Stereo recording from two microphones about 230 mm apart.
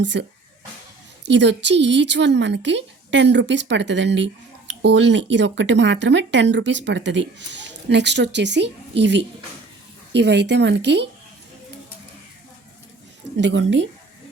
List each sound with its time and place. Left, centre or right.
0.0 s speech: right
13.3 s speech: right